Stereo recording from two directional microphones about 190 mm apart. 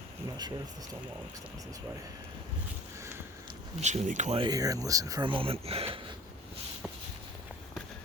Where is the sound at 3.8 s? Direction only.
40° right (ahead or behind).